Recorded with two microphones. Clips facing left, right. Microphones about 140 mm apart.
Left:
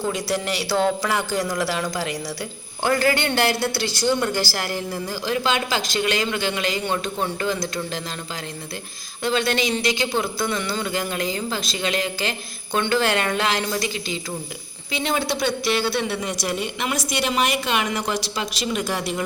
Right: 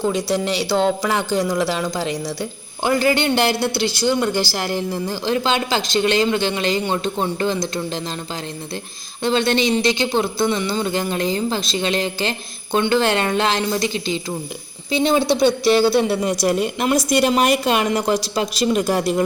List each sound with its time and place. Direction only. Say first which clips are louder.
0.3 s a woman's voice: right 4 dB; 20° right (ahead or behind)
9.2 s a woman's voice: right 4 dB; 25° right (ahead or behind)